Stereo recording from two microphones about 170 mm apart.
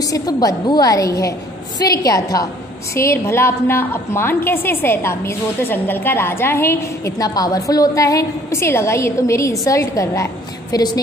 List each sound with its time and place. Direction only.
0.0 s a woman's voice: 20° left (ahead or behind)